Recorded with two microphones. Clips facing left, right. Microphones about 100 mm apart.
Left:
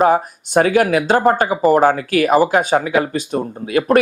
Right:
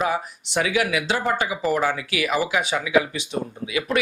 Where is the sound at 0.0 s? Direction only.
45° left (ahead or behind).